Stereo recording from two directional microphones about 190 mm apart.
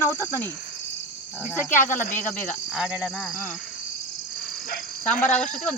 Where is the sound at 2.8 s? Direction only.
5° right (ahead or behind).